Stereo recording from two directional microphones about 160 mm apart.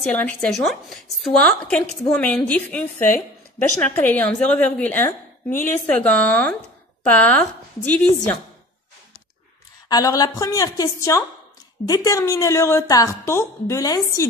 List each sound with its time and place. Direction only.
0.0 s a woman's voice: 10° left (ahead or behind)
3.8 s a woman's voice: 10° left (ahead or behind)
9.8 s a woman's voice: 25° left (ahead or behind)